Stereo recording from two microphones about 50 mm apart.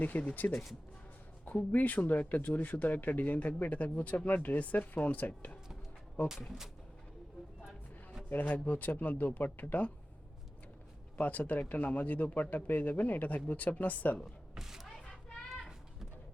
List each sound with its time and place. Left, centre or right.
0.0 s speech: left
1.7 s speech: left
6.2 s speech: centre
8.3 s speech: left
11.2 s speech: left
14.5 s speech: centre